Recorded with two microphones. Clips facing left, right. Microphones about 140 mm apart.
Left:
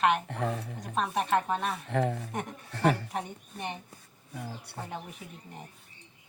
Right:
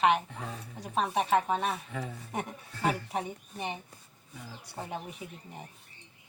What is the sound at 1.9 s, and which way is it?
Speech, 65° left (ahead or behind).